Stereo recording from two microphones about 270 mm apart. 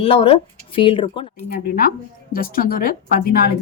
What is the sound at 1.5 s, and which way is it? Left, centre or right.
Speech, left.